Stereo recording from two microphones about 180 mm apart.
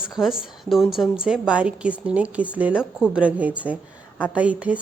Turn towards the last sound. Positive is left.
turn(degrees=-5)  # may be behind; listen again after turning